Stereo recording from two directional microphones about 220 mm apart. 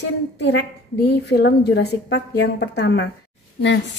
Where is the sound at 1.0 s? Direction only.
50° left (ahead or behind).